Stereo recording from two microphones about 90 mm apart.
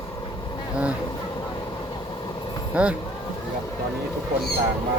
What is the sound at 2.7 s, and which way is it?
Speech, 15° right (ahead or behind).